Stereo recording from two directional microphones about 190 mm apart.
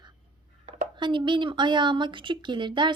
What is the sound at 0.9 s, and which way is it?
Speech, 25° right (ahead or behind).